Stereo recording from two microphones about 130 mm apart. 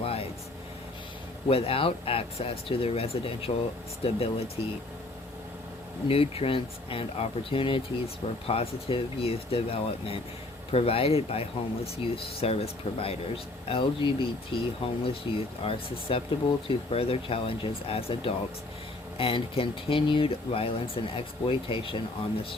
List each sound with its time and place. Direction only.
0.0 s vehicle: 50° left (ahead or behind)
1.5 s speech: 45° left (ahead or behind)
6.1 s speech: 45° left (ahead or behind)